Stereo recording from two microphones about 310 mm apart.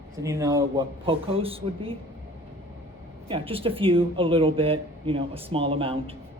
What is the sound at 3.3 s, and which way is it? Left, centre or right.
Speech, centre.